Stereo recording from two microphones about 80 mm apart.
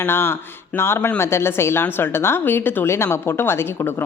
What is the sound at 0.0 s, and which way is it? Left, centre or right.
A woman's voice, left.